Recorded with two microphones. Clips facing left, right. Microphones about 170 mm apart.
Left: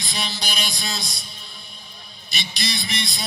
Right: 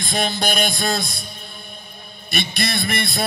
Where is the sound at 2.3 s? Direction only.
55° right (ahead or behind).